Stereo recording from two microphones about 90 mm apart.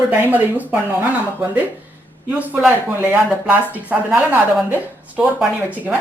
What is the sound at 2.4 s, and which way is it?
Speech, 20° right (ahead or behind).